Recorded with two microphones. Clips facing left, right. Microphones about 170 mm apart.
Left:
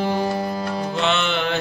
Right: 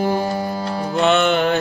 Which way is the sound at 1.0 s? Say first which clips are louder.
Right 8 dB; 50° right (ahead or behind).